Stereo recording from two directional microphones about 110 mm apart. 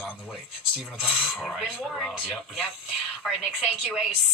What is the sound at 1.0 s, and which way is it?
Speech, centre (ahead or behind).